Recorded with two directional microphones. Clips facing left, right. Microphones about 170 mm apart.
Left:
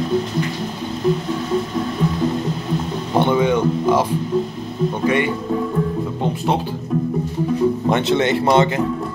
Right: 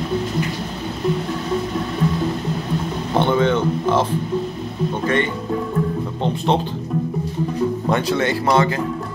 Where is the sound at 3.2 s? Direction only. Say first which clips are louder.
Left 1 dB; 15° left (ahead or behind).